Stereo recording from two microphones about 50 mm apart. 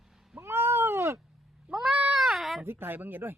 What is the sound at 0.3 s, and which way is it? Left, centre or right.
Cat, right.